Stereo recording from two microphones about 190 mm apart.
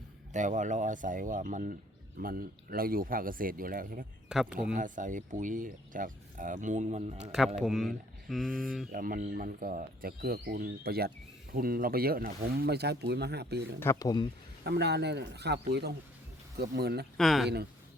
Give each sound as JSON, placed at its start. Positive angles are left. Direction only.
{"t": 0.3, "sound": "speech", "side_deg": -40}
{"t": 4.3, "sound": "speech", "side_deg": -5}
{"t": 4.7, "sound": "speech", "side_deg": -45}
{"t": 7.3, "sound": "speech", "side_deg": 0}
{"t": 8.9, "sound": "speech", "side_deg": -50}
{"t": 13.7, "sound": "speech", "side_deg": 15}
{"t": 14.6, "sound": "speech", "side_deg": -60}
{"t": 17.2, "sound": "speech", "side_deg": 0}